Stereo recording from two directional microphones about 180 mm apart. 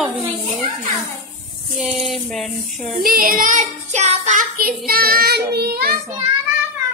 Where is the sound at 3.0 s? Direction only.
55° right (ahead or behind).